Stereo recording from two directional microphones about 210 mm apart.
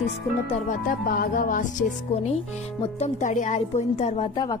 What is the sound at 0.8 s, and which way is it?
Speech, 45° left (ahead or behind).